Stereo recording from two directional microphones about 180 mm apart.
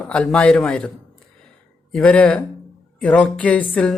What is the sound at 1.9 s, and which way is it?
Speech, 5° left (ahead or behind).